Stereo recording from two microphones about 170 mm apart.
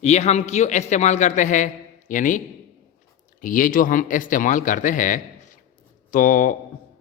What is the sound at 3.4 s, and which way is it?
Speech, 55° left (ahead or behind).